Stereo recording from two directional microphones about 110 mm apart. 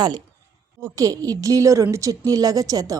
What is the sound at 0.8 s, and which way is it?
Speech, 30° right (ahead or behind).